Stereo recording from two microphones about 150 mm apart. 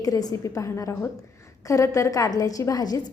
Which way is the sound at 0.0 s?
25° left (ahead or behind).